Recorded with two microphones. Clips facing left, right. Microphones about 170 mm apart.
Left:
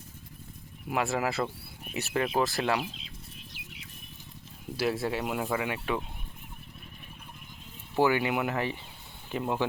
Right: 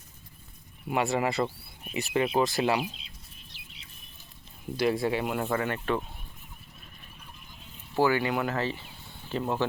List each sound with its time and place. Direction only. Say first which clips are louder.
0.9 s speech: right 2 dB; centre (ahead or behind)
4.8 s speech: right 3 dB; 5° left (ahead or behind)
7.9 s speech: even; 20° left (ahead or behind)